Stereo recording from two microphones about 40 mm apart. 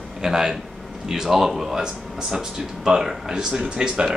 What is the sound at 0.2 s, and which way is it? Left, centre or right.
Speech, centre.